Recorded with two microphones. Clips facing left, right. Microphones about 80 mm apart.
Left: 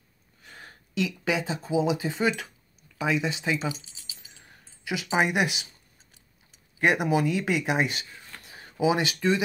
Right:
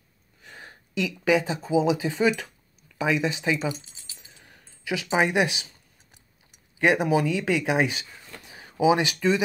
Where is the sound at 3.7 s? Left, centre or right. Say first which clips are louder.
Right 3 dB; right.